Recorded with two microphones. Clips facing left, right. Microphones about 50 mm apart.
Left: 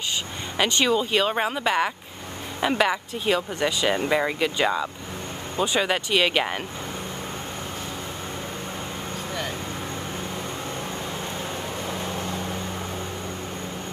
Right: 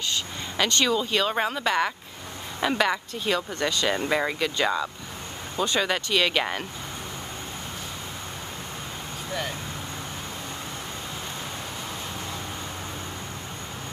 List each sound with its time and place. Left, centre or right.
0.6 s speech: centre